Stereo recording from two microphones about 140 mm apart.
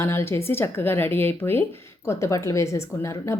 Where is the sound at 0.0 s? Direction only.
20° left (ahead or behind).